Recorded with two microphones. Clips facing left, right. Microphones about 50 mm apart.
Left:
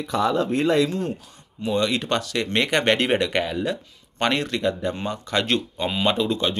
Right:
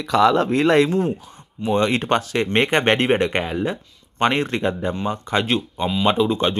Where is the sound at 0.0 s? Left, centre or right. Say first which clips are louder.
Right 6 dB; right.